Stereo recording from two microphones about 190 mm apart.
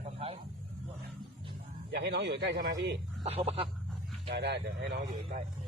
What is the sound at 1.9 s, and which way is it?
Speech, 60° right (ahead or behind).